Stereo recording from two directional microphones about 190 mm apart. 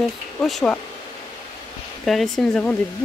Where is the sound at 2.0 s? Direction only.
Centre (ahead or behind).